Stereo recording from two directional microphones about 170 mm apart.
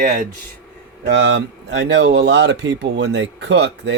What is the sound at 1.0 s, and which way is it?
A man's voice, 80° right.